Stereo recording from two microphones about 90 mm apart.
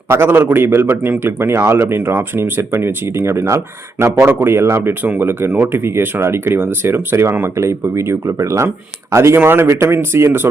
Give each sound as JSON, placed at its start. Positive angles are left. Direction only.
{"t": 0.1, "sound": "speech", "side_deg": -25}